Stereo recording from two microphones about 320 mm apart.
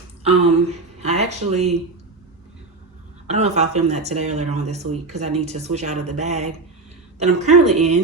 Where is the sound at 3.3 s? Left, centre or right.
Right.